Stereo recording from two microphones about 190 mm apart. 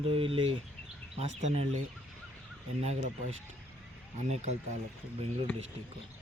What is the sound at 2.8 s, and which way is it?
Speech, 35° right (ahead or behind).